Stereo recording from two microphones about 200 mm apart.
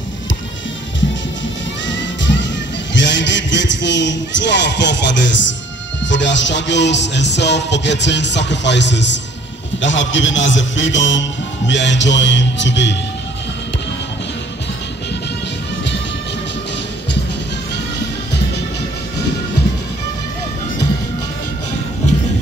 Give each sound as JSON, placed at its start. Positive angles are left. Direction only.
{"t": 1.9, "sound": "music", "side_deg": 65}
{"t": 2.9, "sound": "a man's voice", "side_deg": 65}